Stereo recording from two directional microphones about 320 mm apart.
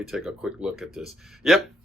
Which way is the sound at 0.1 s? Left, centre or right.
Centre.